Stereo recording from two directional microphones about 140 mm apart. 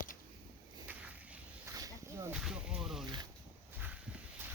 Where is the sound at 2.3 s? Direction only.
5° right (ahead or behind).